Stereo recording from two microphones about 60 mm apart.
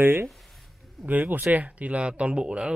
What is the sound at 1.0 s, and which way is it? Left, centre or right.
Speech, right.